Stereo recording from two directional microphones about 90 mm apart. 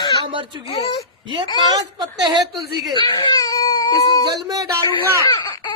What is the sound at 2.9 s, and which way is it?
Baby cry, 55° left (ahead or behind).